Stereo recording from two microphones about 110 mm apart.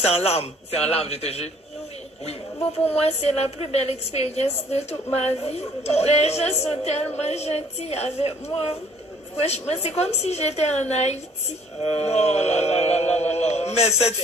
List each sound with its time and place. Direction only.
0.0 s a woman's voice: 70° left (ahead or behind)
2.8 s a woman's voice: 70° left (ahead or behind)